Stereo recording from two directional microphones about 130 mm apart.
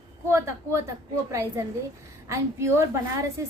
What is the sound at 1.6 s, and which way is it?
A woman's voice, 20° right (ahead or behind).